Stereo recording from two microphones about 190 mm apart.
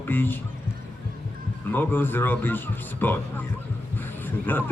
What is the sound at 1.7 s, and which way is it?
A man's voice, 10° left (ahead or behind).